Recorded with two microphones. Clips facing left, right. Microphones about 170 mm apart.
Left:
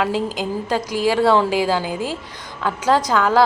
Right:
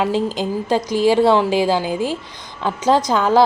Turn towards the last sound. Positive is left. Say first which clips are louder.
# right 2 dB
turn(degrees=-20)  # may be behind; listen again after turning